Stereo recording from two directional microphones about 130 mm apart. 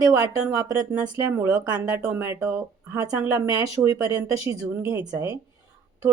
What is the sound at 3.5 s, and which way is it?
Speech, 30° right (ahead or behind).